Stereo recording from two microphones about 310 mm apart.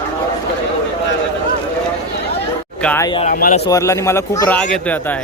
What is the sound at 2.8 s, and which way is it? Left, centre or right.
Speech, centre.